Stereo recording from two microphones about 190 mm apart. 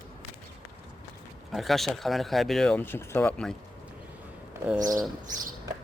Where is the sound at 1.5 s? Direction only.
Centre (ahead or behind).